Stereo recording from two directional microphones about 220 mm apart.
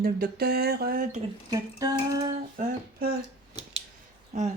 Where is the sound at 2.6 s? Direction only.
40° right (ahead or behind).